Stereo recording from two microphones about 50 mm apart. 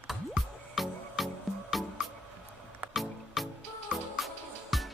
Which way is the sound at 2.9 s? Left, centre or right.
Centre.